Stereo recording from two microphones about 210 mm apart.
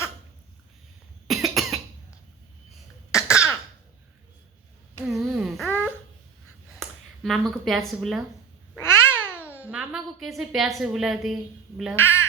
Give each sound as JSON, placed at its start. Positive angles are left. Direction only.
{"t": 1.3, "sound": "cough", "side_deg": 0}
{"t": 3.1, "sound": "throat clearing", "side_deg": 15}
{"t": 5.2, "sound": "a sound", "side_deg": 0}
{"t": 7.6, "sound": "a woman's voice", "side_deg": 0}
{"t": 8.8, "sound": "babbling", "side_deg": 10}
{"t": 9.3, "sound": "babbling", "side_deg": -10}
{"t": 9.6, "sound": "a woman's voice", "side_deg": -5}